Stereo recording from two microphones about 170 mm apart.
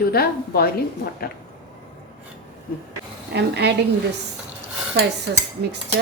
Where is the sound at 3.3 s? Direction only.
80° right.